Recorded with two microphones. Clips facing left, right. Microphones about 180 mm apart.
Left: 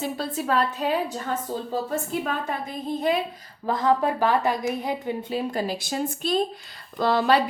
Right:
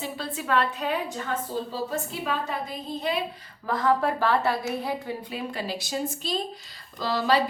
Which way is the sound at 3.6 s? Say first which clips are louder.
Left 2 dB; 20° left (ahead or behind).